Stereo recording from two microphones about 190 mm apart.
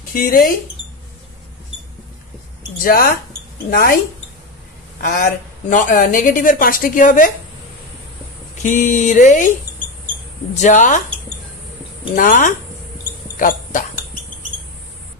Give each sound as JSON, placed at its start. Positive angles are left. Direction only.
{"t": 0.1, "sound": "a woman's voice", "side_deg": 45}
{"t": 2.8, "sound": "a woman's voice", "side_deg": 50}
{"t": 5.0, "sound": "a woman's voice", "side_deg": 45}
{"t": 8.6, "sound": "speech", "side_deg": 40}
{"t": 10.5, "sound": "speech", "side_deg": 40}
{"t": 12.2, "sound": "a woman's voice", "side_deg": 45}